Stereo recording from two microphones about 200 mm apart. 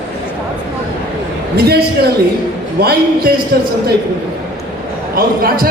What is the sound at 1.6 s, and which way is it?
A man's voice, 50° right (ahead or behind).